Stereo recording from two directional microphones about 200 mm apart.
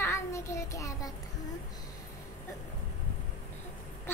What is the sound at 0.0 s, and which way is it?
Child singing, 15° left (ahead or behind).